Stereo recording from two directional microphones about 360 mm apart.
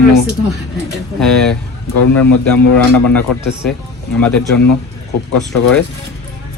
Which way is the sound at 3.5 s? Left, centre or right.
Centre.